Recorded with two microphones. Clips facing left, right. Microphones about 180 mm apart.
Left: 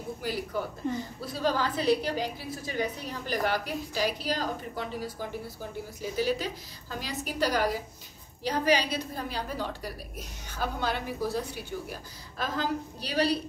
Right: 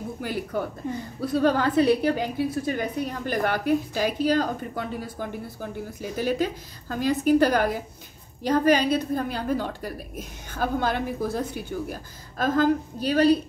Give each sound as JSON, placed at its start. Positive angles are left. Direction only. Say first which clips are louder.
{"t": 0.2, "sound": "a woman's voice", "louder": "right 4 dB", "side_deg": -55}